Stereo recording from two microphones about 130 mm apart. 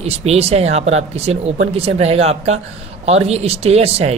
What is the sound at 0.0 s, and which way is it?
Speech, 55° right (ahead or behind).